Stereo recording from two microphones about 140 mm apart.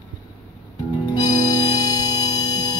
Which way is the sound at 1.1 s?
30° left (ahead or behind).